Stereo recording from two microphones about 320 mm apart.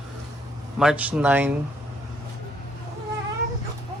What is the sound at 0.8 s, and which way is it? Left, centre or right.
Speech, centre.